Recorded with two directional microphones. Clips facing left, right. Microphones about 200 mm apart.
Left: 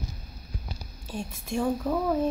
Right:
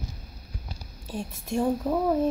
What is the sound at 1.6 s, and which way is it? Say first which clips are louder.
Speech: right 2 dB; 15° right (ahead or behind).